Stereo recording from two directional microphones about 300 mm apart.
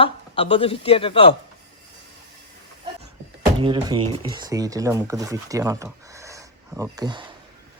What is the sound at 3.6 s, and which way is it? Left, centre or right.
Speech, centre.